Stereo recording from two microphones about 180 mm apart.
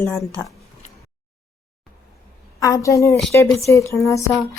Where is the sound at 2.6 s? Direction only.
20° left (ahead or behind).